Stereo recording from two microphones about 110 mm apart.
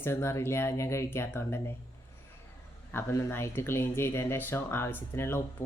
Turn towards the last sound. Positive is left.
turn(degrees=20)  # may be behind; listen again after turning